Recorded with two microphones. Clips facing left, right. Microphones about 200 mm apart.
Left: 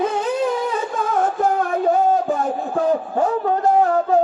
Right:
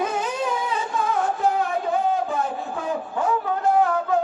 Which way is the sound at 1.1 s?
45° left (ahead or behind).